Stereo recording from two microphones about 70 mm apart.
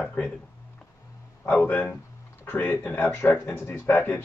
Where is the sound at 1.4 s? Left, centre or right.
Left.